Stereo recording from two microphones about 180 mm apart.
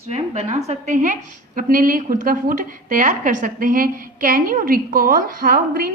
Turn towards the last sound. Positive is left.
turn(degrees=-55)  # may be behind; listen again after turning